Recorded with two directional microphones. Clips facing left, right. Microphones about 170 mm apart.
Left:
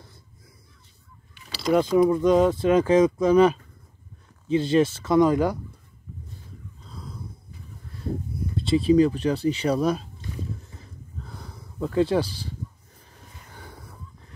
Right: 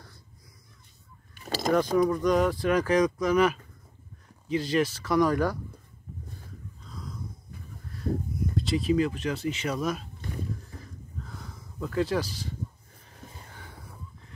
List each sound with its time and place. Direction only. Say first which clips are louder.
1.3 s fowl: right 8 dB; 45° right (ahead or behind)
2.0 s speech: left 5 dB; 25° left (ahead or behind)
6.9 s a sound: even; 30° left (ahead or behind)
8.4 s speech: left 9 dB; 25° left (ahead or behind)
11.4 s speech: left 7 dB; 35° left (ahead or behind)